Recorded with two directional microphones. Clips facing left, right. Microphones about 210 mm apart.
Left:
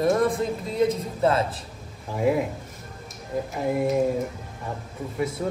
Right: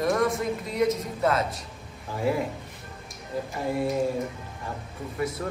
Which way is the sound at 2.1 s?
15° left (ahead or behind).